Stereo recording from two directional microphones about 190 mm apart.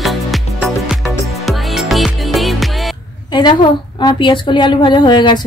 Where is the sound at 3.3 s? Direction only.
20° left (ahead or behind).